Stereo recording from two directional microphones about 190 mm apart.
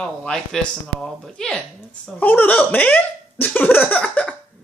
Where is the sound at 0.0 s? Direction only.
5° left (ahead or behind).